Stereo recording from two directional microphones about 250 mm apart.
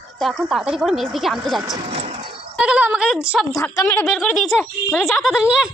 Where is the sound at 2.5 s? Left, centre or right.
Centre.